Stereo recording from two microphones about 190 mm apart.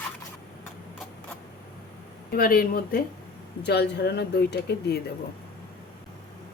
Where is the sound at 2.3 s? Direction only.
50° left (ahead or behind).